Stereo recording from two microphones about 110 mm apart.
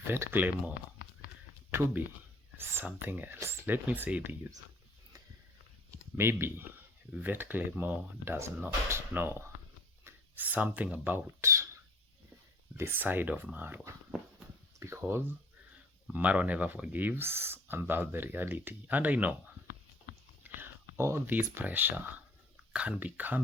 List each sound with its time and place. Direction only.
0.1 s speech: 20° right (ahead or behind)
2.6 s speech: 20° right (ahead or behind)
6.1 s speech: 20° right (ahead or behind)
10.0 s a sound: 20° right (ahead or behind)
10.9 s speech: 15° right (ahead or behind)
12.7 s speech: 20° right (ahead or behind)
16.1 s speech: 10° right (ahead or behind)
20.4 s speech: 25° right (ahead or behind)